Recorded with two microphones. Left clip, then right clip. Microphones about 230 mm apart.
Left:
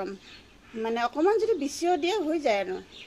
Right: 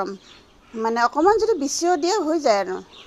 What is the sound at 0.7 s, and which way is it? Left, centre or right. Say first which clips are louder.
A woman's voice: right 8 dB; right.